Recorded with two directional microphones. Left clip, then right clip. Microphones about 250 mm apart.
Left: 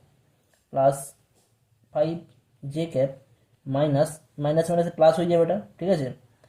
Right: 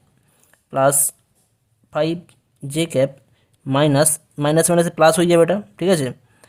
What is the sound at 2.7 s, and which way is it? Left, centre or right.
Speech, right.